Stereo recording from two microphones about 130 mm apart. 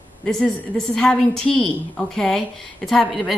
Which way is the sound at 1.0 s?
5° left (ahead or behind).